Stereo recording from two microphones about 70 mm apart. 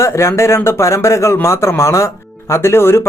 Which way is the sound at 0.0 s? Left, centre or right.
Left.